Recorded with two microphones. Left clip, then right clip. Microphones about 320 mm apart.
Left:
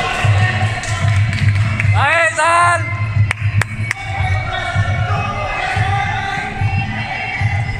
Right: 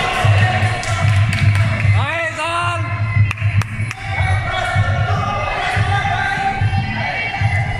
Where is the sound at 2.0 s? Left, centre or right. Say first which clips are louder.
Left 9 dB; left.